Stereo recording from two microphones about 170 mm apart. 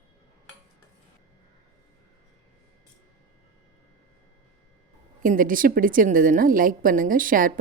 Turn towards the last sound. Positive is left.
turn(degrees=-55)  # may be behind; listen again after turning